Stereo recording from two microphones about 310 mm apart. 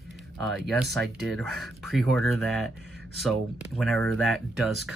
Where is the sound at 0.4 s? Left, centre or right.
Centre.